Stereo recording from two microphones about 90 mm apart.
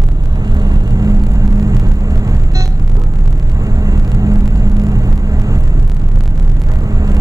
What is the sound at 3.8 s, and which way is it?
Vehicle, 40° right (ahead or behind).